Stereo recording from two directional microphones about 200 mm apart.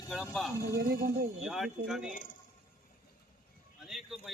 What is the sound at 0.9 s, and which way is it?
Speech, 45° right (ahead or behind).